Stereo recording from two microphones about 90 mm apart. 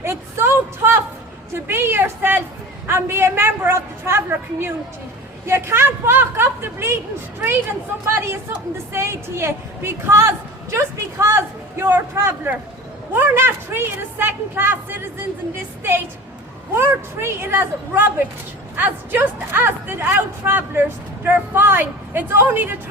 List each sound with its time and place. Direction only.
0.0 s a sound: 30° right (ahead or behind)
1.5 s speech: 25° right (ahead or behind)
8.0 s a woman's voice: 30° right (ahead or behind)